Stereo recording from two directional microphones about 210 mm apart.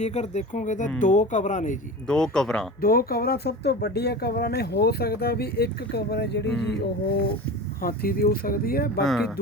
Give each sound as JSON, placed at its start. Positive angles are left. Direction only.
{"t": 0.0, "sound": "speech", "side_deg": 30}
{"t": 2.0, "sound": "speech", "side_deg": 5}
{"t": 2.8, "sound": "speech", "side_deg": 45}
{"t": 9.0, "sound": "speech", "side_deg": 0}